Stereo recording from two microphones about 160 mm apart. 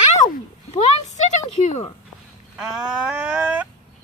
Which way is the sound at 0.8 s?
50° left (ahead or behind).